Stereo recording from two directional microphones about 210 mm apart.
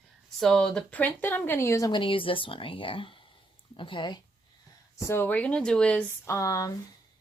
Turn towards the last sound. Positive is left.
turn(degrees=15)  # may be behind; listen again after turning